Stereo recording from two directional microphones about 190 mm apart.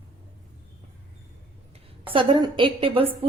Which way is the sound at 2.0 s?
25° right (ahead or behind).